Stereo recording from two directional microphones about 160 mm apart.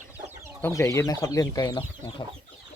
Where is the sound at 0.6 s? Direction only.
20° left (ahead or behind).